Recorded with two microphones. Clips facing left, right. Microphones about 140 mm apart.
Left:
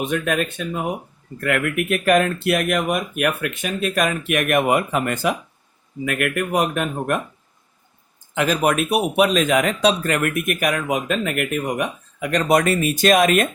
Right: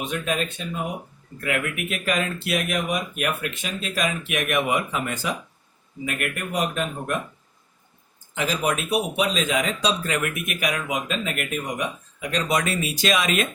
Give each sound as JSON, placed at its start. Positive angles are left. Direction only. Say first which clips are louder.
{"t": 0.1, "sound": "speech", "louder": "left 5 dB", "side_deg": 55}
{"t": 8.4, "sound": "speech", "louder": "left 6 dB", "side_deg": 60}